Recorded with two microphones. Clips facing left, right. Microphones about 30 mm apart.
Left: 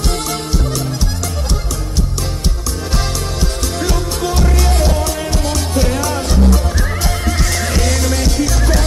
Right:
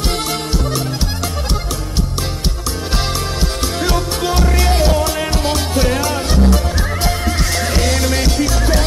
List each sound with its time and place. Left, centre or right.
3.8 s music: right
6.8 s music: centre